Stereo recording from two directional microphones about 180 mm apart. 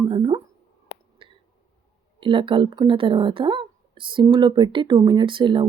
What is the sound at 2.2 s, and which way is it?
Speech, 30° right (ahead or behind).